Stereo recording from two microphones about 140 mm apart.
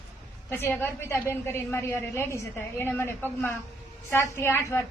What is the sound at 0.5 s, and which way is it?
A woman's voice, 15° left (ahead or behind).